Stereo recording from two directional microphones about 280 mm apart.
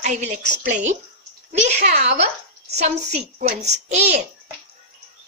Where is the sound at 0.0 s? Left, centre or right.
Right.